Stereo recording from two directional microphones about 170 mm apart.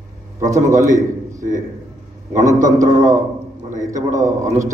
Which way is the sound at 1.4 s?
50° right (ahead or behind).